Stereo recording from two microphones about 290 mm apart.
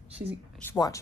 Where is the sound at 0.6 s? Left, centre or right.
Centre.